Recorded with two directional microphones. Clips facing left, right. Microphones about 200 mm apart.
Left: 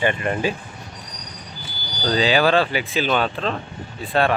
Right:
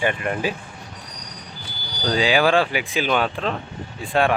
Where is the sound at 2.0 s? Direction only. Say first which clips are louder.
Left 1 dB; 10° right (ahead or behind).